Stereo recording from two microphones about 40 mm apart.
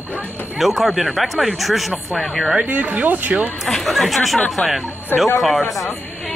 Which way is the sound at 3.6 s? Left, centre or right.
Centre.